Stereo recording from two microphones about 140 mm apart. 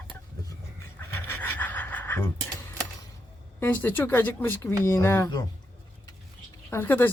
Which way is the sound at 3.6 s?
15° left (ahead or behind).